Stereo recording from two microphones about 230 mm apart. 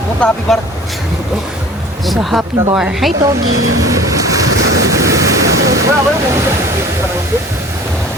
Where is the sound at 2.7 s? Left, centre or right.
Centre.